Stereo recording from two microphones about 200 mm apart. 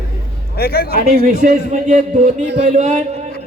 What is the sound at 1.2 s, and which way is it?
A man's voice, 40° right (ahead or behind).